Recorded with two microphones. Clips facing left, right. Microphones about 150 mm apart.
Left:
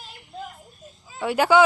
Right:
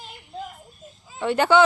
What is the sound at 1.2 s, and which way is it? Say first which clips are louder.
Speech: even; 5° left (ahead or behind).